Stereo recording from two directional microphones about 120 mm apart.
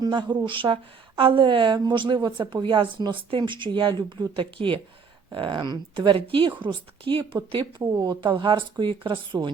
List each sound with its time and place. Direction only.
0.0 s a woman's voice: 40° right (ahead or behind)